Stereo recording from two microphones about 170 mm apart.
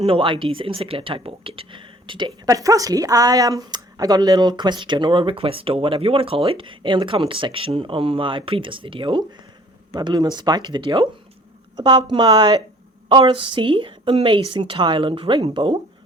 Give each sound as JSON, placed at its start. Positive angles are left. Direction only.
{"t": 0.0, "sound": "speech", "side_deg": -30}